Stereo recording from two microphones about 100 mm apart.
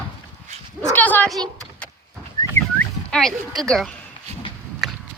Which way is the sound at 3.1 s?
5° left (ahead or behind).